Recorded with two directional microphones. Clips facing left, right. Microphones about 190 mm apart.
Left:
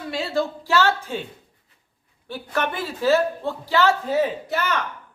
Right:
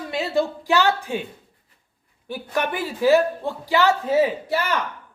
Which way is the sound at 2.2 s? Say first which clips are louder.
Right 1 dB; 15° right (ahead or behind).